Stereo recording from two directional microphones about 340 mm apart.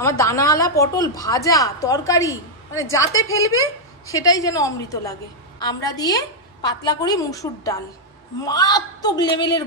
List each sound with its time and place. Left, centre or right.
0.2 s a woman's voice: centre
3.1 s speech: left
4.1 s a woman's voice: centre